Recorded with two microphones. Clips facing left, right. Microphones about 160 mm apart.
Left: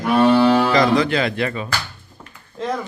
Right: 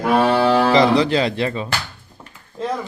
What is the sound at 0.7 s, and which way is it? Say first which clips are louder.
Speech: right 2 dB; 30° right (ahead or behind).